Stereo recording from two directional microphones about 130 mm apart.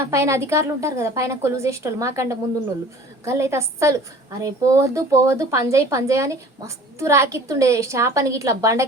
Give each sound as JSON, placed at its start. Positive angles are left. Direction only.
{"t": 0.1, "sound": "speech", "side_deg": -20}